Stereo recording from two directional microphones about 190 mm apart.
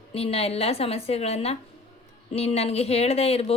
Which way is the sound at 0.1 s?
30° left (ahead or behind).